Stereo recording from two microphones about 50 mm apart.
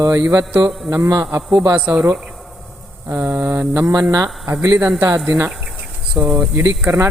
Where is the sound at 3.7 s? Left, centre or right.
Right.